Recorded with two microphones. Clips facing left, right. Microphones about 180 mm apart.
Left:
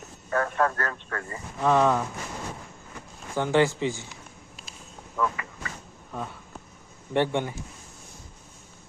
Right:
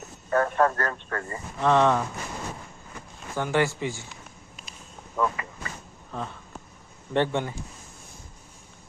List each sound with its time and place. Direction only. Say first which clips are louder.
0.3 s speech: right 3 dB; 35° right (ahead or behind)
1.6 s speech: right 1 dB; 5° left (ahead or behind)
3.3 s speech: left 2 dB; 20° left (ahead or behind)
5.1 s vehicle: right 1 dB; 25° right (ahead or behind)
7.1 s speech: even; 15° left (ahead or behind)